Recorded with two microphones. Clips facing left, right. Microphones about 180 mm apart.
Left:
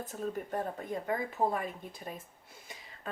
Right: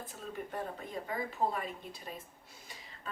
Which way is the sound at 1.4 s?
45° left (ahead or behind).